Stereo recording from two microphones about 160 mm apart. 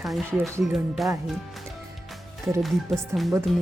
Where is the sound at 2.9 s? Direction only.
Centre (ahead or behind).